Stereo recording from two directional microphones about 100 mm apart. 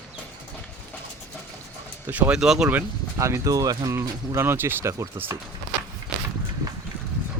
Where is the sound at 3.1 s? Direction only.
30° right (ahead or behind).